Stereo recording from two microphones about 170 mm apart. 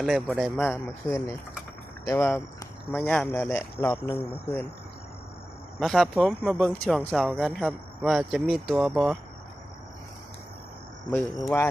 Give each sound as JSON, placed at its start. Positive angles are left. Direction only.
{"t": 0.0, "sound": "speech", "side_deg": 0}
{"t": 5.8, "sound": "speech", "side_deg": 0}
{"t": 11.3, "sound": "speech", "side_deg": 15}